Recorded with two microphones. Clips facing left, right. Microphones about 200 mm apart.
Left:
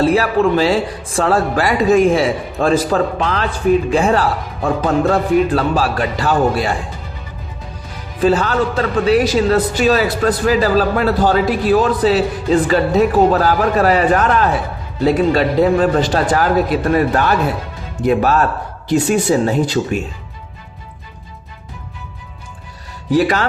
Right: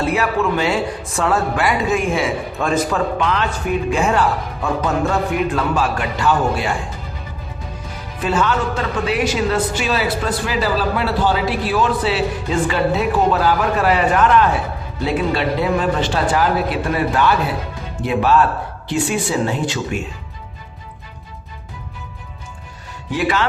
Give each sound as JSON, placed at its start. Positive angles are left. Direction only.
{"t": 0.0, "sound": "speech", "side_deg": 35}
{"t": 8.2, "sound": "speech", "side_deg": 35}
{"t": 23.0, "sound": "speech", "side_deg": 40}